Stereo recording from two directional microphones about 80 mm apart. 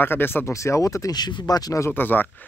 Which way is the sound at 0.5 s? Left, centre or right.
Left.